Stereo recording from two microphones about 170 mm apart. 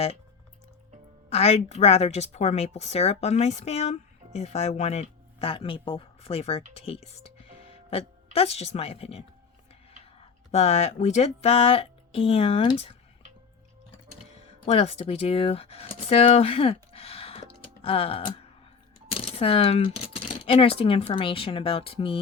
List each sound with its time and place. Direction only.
1.3 s a woman's voice: 35° left (ahead or behind)
10.5 s speech: 40° left (ahead or behind)
14.6 s speech: 35° left (ahead or behind)